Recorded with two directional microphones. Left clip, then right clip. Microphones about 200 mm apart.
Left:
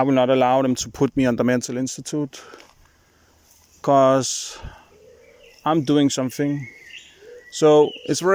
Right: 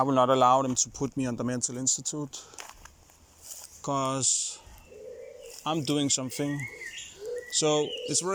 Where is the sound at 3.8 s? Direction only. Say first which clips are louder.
Left 14 dB; 40° left (ahead or behind).